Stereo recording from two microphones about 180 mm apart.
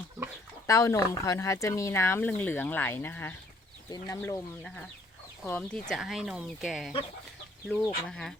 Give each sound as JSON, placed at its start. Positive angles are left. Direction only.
{"t": 0.7, "sound": "speech", "side_deg": 15}
{"t": 4.6, "sound": "speech", "side_deg": 5}